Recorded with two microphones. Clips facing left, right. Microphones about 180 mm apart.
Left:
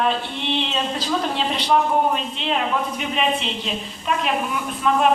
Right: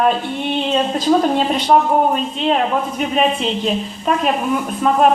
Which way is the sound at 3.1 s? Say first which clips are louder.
Right 6 dB; 40° right (ahead or behind).